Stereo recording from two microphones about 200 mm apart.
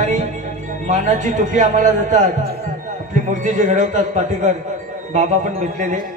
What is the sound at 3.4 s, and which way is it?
Music, 40° right (ahead or behind).